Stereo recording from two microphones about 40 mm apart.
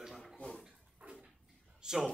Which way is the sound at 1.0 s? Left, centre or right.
Right.